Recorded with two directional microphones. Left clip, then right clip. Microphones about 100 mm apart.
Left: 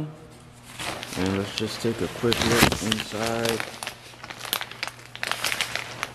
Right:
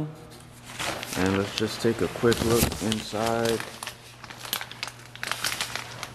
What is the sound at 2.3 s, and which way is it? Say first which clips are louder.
Speech: left 5 dB; 20° left (ahead or behind).